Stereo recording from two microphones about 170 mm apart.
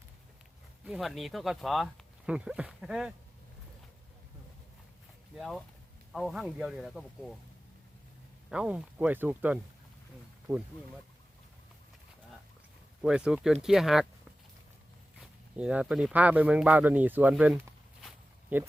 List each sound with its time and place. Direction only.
0.9 s speech: centre (ahead or behind)
5.4 s speech: centre (ahead or behind)
8.4 s speech: 5° right (ahead or behind)
13.0 s speech: 5° right (ahead or behind)
15.2 s speech: 5° right (ahead or behind)